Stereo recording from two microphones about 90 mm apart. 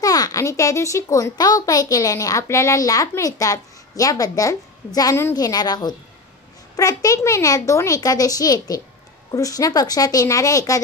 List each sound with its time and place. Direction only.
0.0 s a child's voice: 45° left (ahead or behind)